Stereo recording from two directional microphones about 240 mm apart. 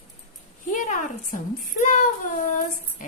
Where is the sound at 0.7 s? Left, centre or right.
Left.